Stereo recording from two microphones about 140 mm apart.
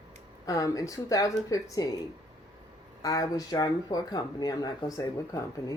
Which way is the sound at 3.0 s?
25° left (ahead or behind).